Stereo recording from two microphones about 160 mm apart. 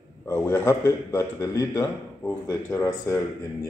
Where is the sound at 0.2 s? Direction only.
15° left (ahead or behind).